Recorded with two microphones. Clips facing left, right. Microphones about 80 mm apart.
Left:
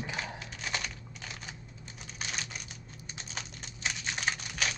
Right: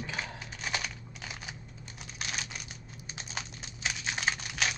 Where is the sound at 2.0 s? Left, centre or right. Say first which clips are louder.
Right 1 dB; centre.